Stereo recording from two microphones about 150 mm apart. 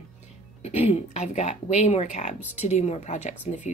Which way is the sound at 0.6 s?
45° left (ahead or behind).